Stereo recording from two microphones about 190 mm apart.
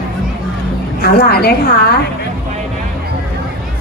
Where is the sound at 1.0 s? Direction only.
55° left (ahead or behind).